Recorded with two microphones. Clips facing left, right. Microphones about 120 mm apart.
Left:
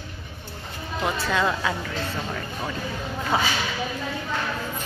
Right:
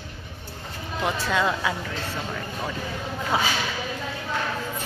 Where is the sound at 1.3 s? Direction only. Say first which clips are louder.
Even; 15° right (ahead or behind).